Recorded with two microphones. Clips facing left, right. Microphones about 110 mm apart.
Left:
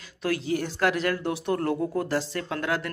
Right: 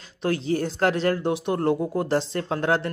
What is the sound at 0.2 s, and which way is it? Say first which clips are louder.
Speech: right 3 dB; 30° right (ahead or behind).